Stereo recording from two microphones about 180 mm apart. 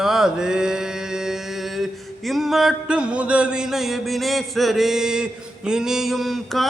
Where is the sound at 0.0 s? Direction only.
Centre (ahead or behind).